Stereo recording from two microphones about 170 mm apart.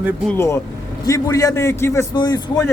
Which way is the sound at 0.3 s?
15° left (ahead or behind).